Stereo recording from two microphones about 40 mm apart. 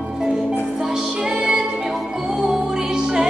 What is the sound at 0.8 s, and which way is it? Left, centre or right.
Music, centre.